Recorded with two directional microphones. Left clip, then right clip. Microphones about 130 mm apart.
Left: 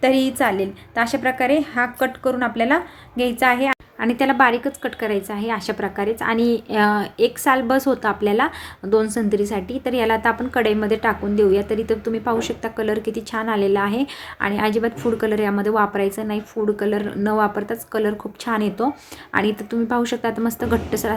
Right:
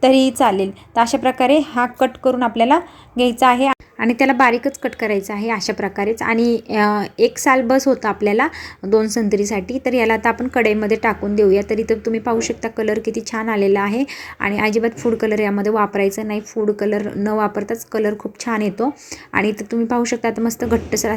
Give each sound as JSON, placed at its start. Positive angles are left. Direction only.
{"t": 0.0, "sound": "a woman's voice", "side_deg": -35}
{"t": 13.0, "sound": "speech", "side_deg": 0}
{"t": 13.3, "sound": "a woman's voice", "side_deg": -30}